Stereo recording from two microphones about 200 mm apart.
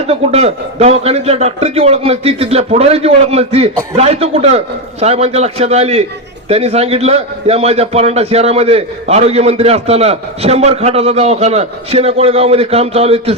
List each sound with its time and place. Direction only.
0.1 s a man's voice: 30° right (ahead or behind)